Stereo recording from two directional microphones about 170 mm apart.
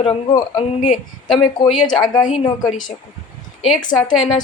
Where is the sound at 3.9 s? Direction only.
20° left (ahead or behind).